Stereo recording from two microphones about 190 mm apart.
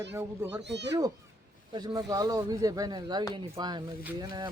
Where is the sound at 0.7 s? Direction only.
65° right (ahead or behind).